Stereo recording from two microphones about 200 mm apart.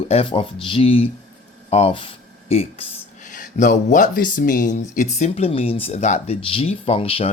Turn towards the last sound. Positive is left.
turn(degrees=30)  # may be behind; listen again after turning